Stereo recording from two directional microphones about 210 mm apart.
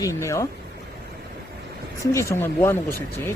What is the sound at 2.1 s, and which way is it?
Speech, 15° left (ahead or behind).